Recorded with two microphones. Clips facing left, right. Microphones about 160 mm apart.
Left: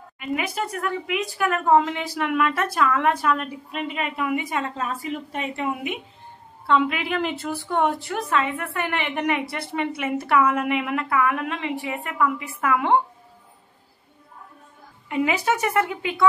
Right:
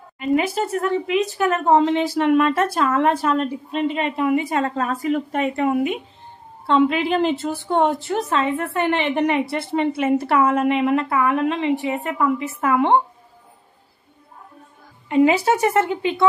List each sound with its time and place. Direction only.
0.2 s a woman's voice: 35° right (ahead or behind)
6.7 s a woman's voice: 30° right (ahead or behind)
15.0 s a woman's voice: 30° right (ahead or behind)